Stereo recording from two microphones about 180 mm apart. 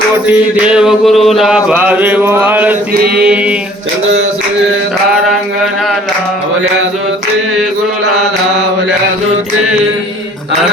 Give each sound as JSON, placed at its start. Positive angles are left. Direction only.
{"t": 0.7, "sound": "music", "side_deg": -5}
{"t": 2.9, "sound": "mantra", "side_deg": -60}
{"t": 3.2, "sound": "music", "side_deg": -5}